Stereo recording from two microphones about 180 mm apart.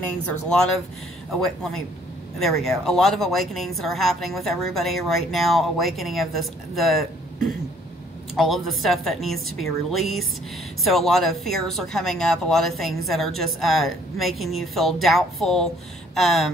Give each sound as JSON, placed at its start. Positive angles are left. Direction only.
{"t": 0.3, "sound": "speech", "side_deg": 5}
{"t": 8.4, "sound": "speech", "side_deg": 0}